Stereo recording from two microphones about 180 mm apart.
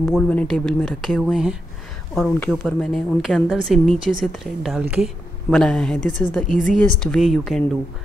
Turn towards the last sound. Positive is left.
turn(degrees=0)  # may be behind; listen again after turning